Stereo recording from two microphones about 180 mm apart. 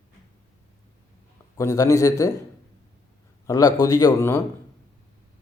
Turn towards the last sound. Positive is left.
turn(degrees=15)  # may be behind; listen again after turning